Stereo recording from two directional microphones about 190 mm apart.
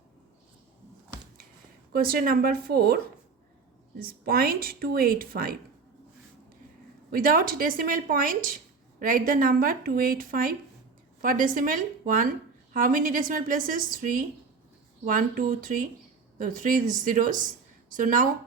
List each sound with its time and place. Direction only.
1.9 s speech: 50° right (ahead or behind)
4.0 s speech: 50° right (ahead or behind)
7.1 s speech: 45° right (ahead or behind)